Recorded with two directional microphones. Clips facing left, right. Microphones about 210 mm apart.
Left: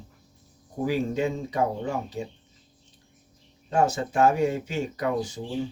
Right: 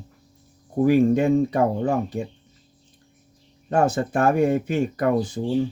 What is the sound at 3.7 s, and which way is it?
Speech, 55° right (ahead or behind).